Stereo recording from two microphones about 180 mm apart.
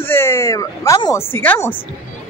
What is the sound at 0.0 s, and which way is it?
Speech, 10° left (ahead or behind).